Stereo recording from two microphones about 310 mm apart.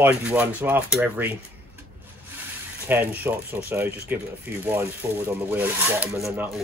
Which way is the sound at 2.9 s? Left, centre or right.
Centre.